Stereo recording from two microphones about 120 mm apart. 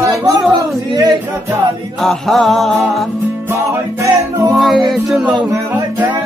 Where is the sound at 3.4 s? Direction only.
25° right (ahead or behind).